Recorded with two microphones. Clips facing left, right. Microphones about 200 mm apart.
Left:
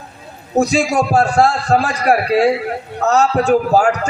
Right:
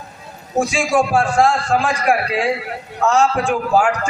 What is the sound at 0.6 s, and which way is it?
A man's voice, 40° left (ahead or behind).